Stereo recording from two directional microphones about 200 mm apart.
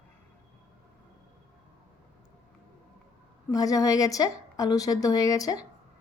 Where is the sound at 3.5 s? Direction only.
15° left (ahead or behind).